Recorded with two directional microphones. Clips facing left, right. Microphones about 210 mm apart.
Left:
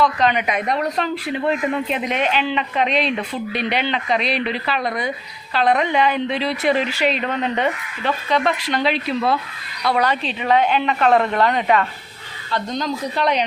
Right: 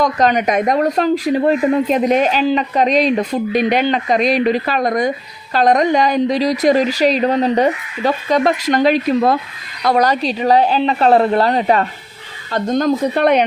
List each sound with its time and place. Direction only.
0.0 s a woman's voice: 40° right (ahead or behind)
12.5 s a woman's voice: 45° right (ahead or behind)